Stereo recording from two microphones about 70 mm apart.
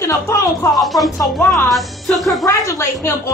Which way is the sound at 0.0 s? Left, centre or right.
Left.